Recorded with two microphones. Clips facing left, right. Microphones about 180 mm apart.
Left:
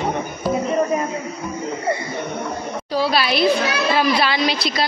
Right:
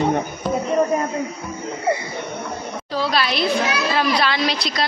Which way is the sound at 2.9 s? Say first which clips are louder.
Left 2 dB; 5° left (ahead or behind).